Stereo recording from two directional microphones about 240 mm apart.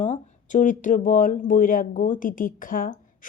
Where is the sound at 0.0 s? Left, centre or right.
Left.